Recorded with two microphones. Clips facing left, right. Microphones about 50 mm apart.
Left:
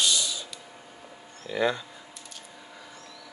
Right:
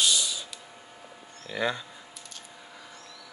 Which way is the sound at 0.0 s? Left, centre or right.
Centre.